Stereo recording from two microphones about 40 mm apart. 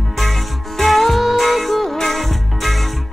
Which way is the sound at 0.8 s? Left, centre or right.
Centre.